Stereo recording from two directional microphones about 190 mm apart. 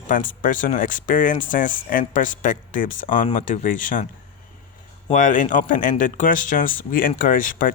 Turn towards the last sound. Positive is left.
turn(degrees=45)  # may be behind; listen again after turning